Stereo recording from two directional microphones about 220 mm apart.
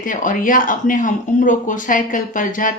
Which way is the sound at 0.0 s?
35° left (ahead or behind).